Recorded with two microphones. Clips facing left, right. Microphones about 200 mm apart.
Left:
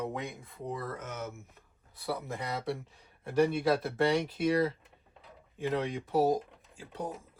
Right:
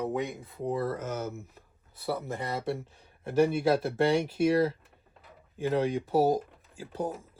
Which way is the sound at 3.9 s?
30° right (ahead or behind).